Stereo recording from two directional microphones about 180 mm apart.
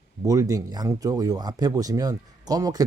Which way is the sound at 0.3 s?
20° right (ahead or behind).